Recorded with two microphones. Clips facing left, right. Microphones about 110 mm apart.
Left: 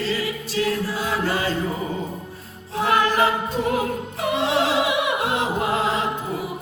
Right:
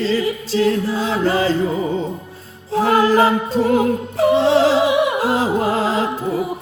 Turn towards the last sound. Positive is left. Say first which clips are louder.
# right 4 dB
turn(degrees=-35)  # may be behind; listen again after turning